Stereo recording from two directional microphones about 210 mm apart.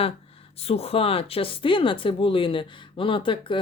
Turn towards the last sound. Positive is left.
turn(degrees=25)  # may be behind; listen again after turning